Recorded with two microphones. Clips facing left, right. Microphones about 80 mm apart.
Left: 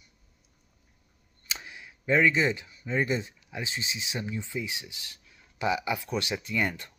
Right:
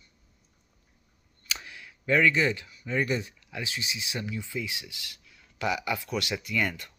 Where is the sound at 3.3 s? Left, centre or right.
Left.